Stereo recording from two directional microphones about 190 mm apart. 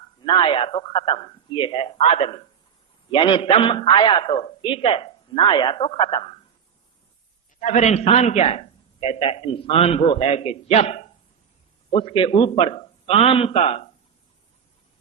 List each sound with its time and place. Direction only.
0.3 s a man's voice: 25° left (ahead or behind)
7.6 s a man's voice: 40° left (ahead or behind)